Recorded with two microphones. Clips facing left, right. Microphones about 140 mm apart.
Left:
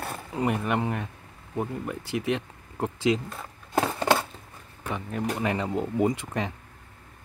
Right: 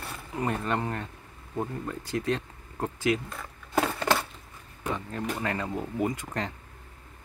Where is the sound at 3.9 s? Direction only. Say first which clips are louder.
Left 3 dB; 25° left (ahead or behind).